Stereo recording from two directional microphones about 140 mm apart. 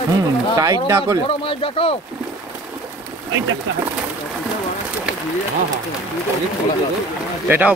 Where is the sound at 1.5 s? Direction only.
40° left (ahead or behind).